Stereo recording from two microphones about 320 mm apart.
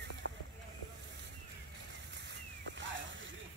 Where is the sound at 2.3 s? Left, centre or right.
Right.